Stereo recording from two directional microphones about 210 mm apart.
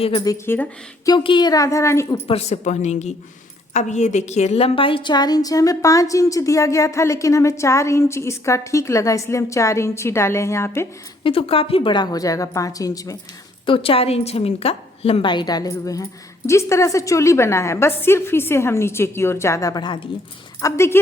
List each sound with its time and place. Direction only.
0.2 s a woman's voice: 15° left (ahead or behind)
1.1 s a woman's voice: 20° left (ahead or behind)
2.2 s a woman's voice: 30° left (ahead or behind); by 10.8 s 10° left (ahead or behind)
11.2 s a woman's voice: 25° left (ahead or behind)